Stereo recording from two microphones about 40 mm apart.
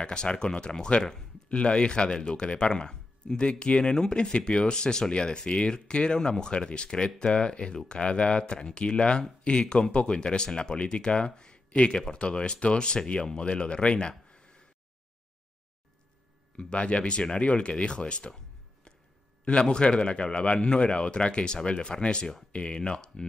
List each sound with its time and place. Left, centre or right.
0.0 s speech: left
16.5 s speech: left
19.4 s speech: left